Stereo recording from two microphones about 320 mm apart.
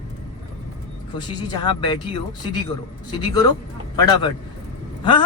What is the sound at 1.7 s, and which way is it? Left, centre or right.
Speech, centre.